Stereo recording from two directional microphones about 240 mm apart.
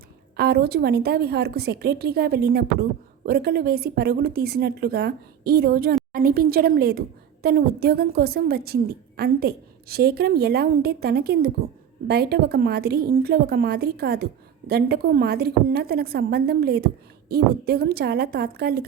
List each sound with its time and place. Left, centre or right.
0.3 s a woman's voice: right